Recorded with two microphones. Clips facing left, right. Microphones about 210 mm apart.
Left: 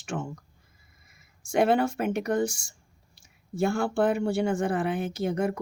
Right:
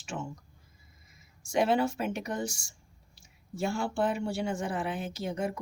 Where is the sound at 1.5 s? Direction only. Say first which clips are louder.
Left 4 dB; 55° left (ahead or behind).